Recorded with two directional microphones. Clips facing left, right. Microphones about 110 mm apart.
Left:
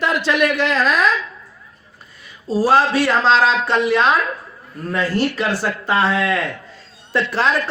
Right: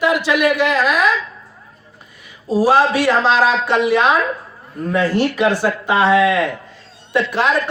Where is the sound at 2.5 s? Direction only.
15° right (ahead or behind).